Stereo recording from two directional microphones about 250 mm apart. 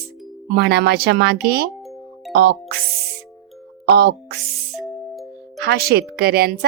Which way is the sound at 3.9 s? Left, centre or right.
Right.